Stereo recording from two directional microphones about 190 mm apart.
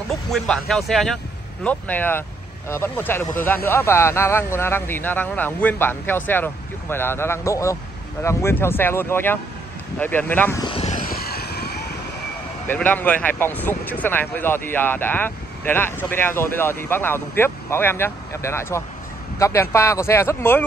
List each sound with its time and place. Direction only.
0.3 s speech: centre (ahead or behind)
10.6 s vehicle: 30° left (ahead or behind)
10.9 s vehicle: 50° left (ahead or behind)
12.6 s speech: 10° left (ahead or behind)